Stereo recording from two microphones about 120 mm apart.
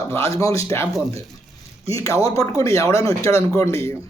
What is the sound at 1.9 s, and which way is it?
Speech, 25° left (ahead or behind).